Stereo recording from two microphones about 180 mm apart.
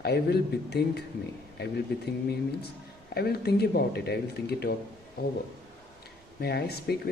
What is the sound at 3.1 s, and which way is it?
Speech, 60° left (ahead or behind).